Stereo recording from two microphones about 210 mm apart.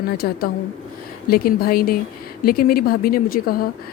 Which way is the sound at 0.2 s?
45° left (ahead or behind).